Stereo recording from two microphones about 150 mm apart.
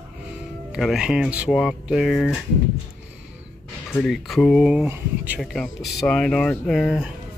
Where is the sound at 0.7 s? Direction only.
5° right (ahead or behind).